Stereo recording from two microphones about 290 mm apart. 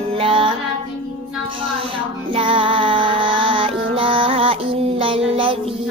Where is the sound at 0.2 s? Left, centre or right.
Centre.